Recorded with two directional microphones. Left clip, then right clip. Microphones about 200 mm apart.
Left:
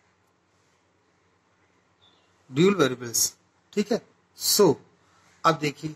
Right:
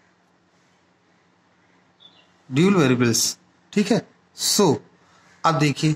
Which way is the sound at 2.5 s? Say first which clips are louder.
Right 3 dB; 40° right (ahead or behind).